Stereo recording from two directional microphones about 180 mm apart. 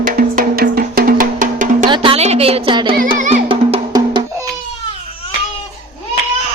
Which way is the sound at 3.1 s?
45° right (ahead or behind).